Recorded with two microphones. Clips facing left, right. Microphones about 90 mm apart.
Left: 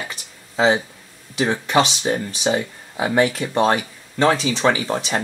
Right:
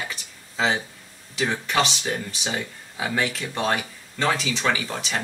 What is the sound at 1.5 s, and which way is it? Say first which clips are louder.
Speech: left 6 dB; 30° left (ahead or behind).